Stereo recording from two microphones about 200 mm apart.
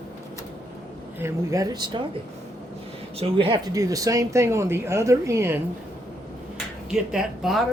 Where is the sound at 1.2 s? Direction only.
15° right (ahead or behind).